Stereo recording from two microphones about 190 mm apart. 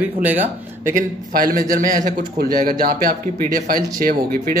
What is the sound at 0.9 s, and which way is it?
A man's voice, 45° right (ahead or behind).